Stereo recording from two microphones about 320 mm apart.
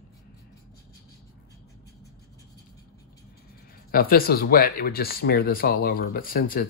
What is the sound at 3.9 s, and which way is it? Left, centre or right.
Speech, left.